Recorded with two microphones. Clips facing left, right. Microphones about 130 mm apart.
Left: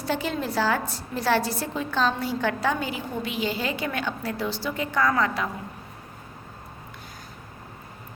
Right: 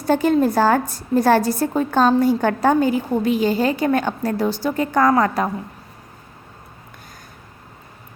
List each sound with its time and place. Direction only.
0.0 s a woman's voice: 45° right (ahead or behind)